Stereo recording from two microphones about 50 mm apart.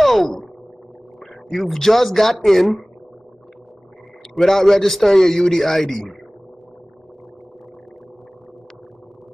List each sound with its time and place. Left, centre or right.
0.0 s a sound: centre
1.5 s speech: centre
4.4 s a man's voice: centre